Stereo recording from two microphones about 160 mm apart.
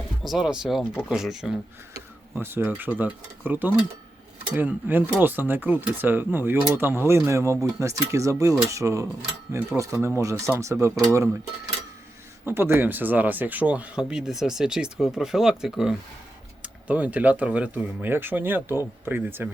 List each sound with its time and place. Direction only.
0.2 s speech: centre (ahead or behind)
2.3 s speech: 15° right (ahead or behind)
12.5 s speech: 15° right (ahead or behind)